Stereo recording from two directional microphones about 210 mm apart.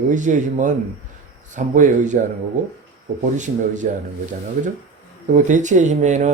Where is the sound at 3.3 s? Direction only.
35° right (ahead or behind).